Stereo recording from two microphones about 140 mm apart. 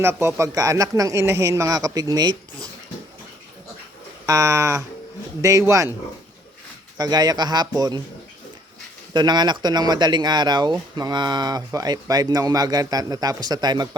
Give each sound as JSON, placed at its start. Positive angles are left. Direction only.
{"t": 0.0, "sound": "speech", "side_deg": -20}
{"t": 4.3, "sound": "speech", "side_deg": -20}
{"t": 6.9, "sound": "speech", "side_deg": -30}
{"t": 9.1, "sound": "speech", "side_deg": -30}